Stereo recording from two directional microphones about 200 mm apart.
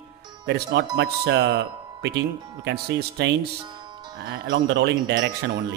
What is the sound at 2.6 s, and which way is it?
Speech, 60° right (ahead or behind).